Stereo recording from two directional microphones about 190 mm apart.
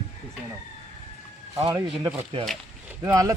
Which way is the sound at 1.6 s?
20° right (ahead or behind).